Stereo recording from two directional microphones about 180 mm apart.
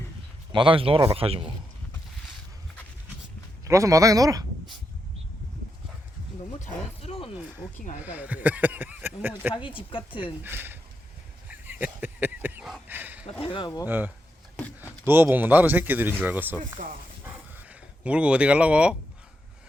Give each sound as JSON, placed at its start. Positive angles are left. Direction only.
{"t": 0.5, "sound": "speech", "side_deg": -30}
{"t": 3.6, "sound": "speech", "side_deg": -15}
{"t": 6.6, "sound": "speech", "side_deg": 35}
{"t": 8.0, "sound": "speech", "side_deg": -10}
{"t": 9.6, "sound": "a woman's voice", "side_deg": 30}
{"t": 10.4, "sound": "speech", "side_deg": -10}
{"t": 11.4, "sound": "a sound", "side_deg": -10}
{"t": 13.4, "sound": "a woman's voice", "side_deg": 25}
{"t": 13.8, "sound": "speech", "side_deg": -10}
{"t": 16.8, "sound": "speech", "side_deg": -50}
{"t": 17.2, "sound": "a sound", "side_deg": -10}